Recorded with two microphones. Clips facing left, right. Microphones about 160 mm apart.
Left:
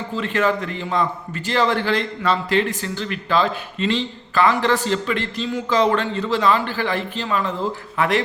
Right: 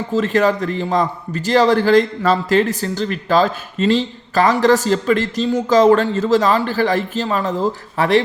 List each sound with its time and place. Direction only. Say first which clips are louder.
0.1 s a man's voice: right 5 dB; 40° right (ahead or behind)